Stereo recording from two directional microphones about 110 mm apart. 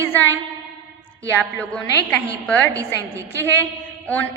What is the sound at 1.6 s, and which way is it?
Speech, 10° left (ahead or behind).